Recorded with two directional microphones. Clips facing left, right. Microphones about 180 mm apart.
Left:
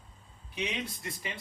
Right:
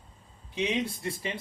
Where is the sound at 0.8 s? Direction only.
30° right (ahead or behind).